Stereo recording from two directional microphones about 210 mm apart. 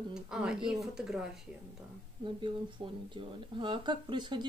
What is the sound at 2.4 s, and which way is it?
Speech, 25° right (ahead or behind).